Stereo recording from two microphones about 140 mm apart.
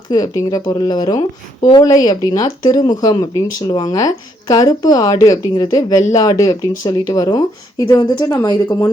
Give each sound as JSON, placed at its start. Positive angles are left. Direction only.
{"t": 0.1, "sound": "speech", "side_deg": 30}